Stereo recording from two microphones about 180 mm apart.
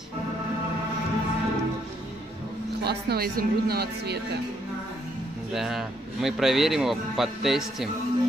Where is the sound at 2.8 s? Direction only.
65° right (ahead or behind).